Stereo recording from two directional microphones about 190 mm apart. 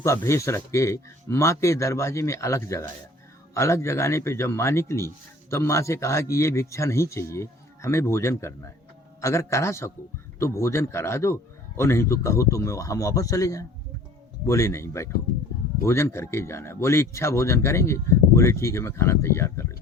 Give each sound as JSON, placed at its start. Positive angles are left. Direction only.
{"t": 0.0, "sound": "speech", "side_deg": 15}